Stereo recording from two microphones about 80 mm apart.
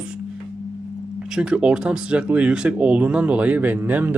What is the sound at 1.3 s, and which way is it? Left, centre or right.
Speech, centre.